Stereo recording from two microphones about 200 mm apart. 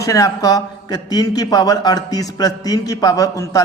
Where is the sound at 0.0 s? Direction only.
15° left (ahead or behind).